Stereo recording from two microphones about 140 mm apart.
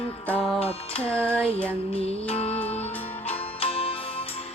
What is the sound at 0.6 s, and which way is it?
Music, 45° left (ahead or behind).